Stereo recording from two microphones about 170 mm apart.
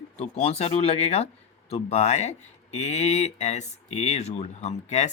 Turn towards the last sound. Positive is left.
turn(degrees=40)  # may be behind; listen again after turning